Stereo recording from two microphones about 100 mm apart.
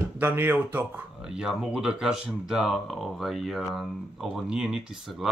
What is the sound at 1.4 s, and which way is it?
Speech, 5° right (ahead or behind).